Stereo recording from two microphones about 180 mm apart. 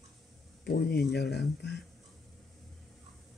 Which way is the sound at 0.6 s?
60° left (ahead or behind).